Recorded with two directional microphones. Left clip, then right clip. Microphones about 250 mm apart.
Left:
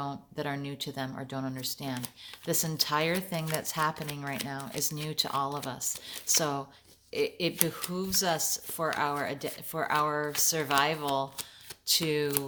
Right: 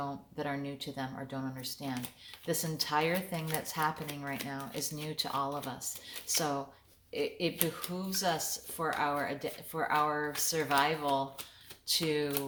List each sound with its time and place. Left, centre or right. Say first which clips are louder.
0.0 s speech: left 2 dB; left